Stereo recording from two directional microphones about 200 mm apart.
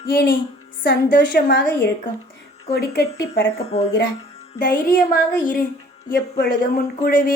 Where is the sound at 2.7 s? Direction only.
55° left (ahead or behind).